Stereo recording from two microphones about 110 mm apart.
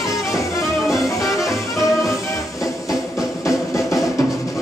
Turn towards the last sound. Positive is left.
turn(degrees=30)  # may be behind; listen again after turning